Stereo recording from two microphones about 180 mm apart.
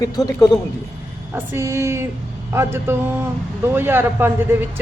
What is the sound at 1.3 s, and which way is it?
A woman's voice, 15° right (ahead or behind).